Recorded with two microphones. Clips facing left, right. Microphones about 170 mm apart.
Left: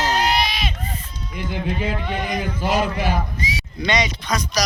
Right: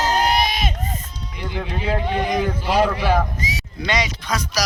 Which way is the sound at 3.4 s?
45° right (ahead or behind).